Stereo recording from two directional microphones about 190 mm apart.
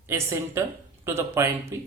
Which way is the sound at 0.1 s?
10° right (ahead or behind).